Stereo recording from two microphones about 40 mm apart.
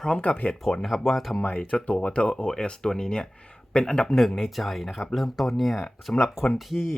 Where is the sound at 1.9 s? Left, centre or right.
Left.